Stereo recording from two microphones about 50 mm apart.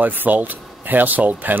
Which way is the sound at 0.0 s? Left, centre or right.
Right.